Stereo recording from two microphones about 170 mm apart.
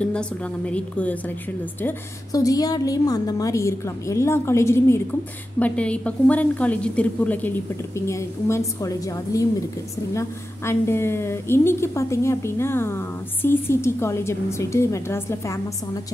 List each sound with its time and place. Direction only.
0.0 s a woman's voice: 5° left (ahead or behind)